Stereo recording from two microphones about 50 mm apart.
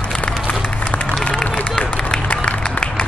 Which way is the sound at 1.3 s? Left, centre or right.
Centre.